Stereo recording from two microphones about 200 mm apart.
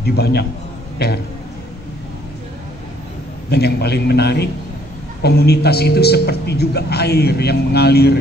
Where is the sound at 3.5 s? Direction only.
55° left (ahead or behind).